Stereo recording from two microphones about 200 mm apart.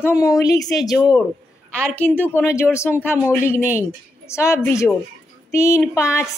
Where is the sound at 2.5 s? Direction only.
5° right (ahead or behind).